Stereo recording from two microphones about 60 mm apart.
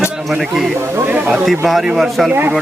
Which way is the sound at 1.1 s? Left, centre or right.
Right.